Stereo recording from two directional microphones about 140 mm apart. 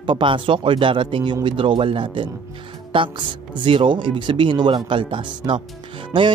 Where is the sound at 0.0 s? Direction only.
35° right (ahead or behind).